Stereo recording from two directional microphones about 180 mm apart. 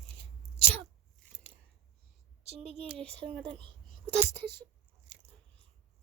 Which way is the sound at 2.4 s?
35° right (ahead or behind).